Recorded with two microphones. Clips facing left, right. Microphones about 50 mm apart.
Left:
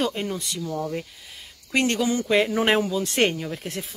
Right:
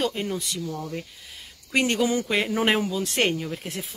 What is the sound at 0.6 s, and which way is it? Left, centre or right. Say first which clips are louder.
Speech: left 4 dB; centre.